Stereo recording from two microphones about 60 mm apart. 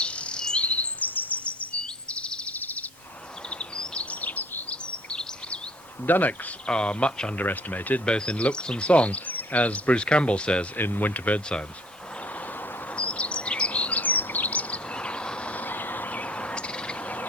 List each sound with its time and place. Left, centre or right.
0.0 s bird vocalization: centre
2.6 s a sound: left
3.5 s bird vocalization: centre
6.1 s speech: left
6.7 s speech: centre
7.4 s speech: left
8.1 s speech: centre
10.8 s speech: left
13.0 s bird vocalization: centre